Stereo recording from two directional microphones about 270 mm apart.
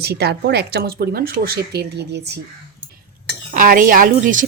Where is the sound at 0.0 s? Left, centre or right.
Right.